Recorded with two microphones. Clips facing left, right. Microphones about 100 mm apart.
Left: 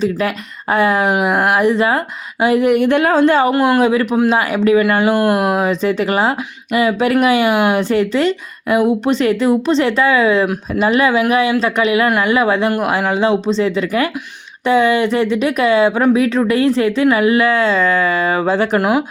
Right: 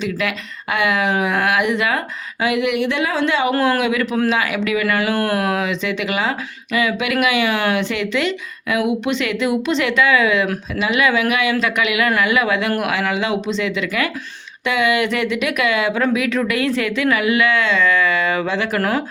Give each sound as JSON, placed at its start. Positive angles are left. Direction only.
{"t": 0.0, "sound": "speech", "side_deg": 35}
{"t": 1.1, "sound": "speech", "side_deg": 10}
{"t": 1.5, "sound": "speech", "side_deg": 35}
{"t": 3.5, "sound": "speech", "side_deg": 20}
{"t": 3.8, "sound": "speech", "side_deg": 35}
{"t": 5.6, "sound": "speech", "side_deg": 40}
{"t": 18.7, "sound": "speech", "side_deg": 20}